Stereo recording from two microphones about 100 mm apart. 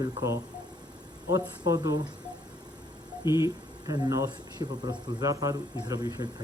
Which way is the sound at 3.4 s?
40° right (ahead or behind).